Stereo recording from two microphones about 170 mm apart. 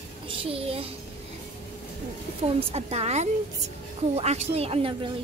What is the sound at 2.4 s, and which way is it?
A woman's voice, 40° right (ahead or behind).